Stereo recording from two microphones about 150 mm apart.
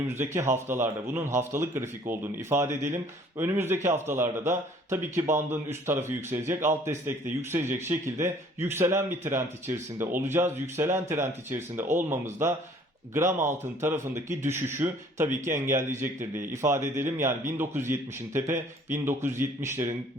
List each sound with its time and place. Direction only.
0.1 s a man's voice: 15° right (ahead or behind)
16.6 s a man's voice: 15° right (ahead or behind)